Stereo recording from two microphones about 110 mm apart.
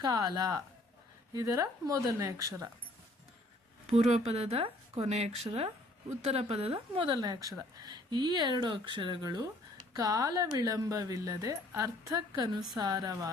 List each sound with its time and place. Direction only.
0.0 s speech: 35° right (ahead or behind)
3.8 s speech: 80° right; by 13.3 s 35° right (ahead or behind)